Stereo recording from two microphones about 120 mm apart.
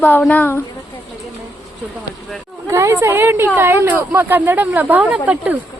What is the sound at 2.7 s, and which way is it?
A woman's voice, 25° right (ahead or behind).